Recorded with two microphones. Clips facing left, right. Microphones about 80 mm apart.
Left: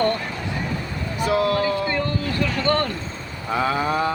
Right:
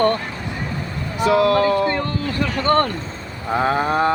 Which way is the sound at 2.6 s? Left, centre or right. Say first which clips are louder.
Right 7 dB; right.